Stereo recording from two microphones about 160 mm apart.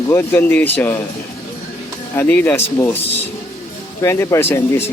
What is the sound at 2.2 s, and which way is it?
Speech, 10° left (ahead or behind).